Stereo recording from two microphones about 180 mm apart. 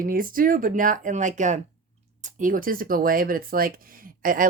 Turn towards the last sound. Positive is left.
turn(degrees=-50)  # may be behind; listen again after turning